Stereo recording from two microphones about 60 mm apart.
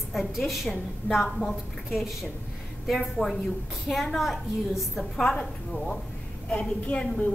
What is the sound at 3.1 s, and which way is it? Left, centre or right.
A woman's voice, centre.